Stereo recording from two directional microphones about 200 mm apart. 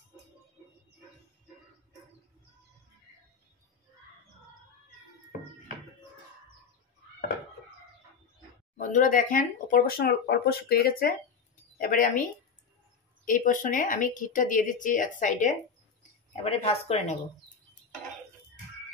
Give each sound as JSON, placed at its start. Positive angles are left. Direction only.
{"t": 8.7, "sound": "speech", "side_deg": 40}
{"t": 13.2, "sound": "speech", "side_deg": 40}